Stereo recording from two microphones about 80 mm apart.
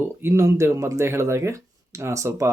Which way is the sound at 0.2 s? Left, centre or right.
Right.